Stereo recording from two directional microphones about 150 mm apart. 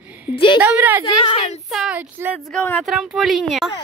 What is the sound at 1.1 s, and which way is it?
Speech, 35° left (ahead or behind).